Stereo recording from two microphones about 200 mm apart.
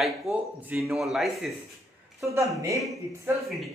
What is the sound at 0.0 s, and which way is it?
A man's voice, 5° right (ahead or behind).